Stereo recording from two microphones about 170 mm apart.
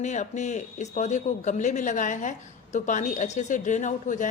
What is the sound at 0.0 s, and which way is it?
A woman's voice, 45° left (ahead or behind).